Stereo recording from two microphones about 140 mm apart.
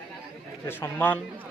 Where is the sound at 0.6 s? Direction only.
15° left (ahead or behind).